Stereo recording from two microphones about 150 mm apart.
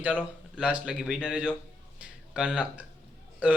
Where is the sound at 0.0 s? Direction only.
10° right (ahead or behind).